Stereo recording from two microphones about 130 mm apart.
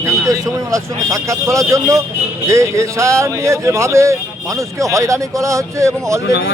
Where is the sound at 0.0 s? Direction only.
25° right (ahead or behind).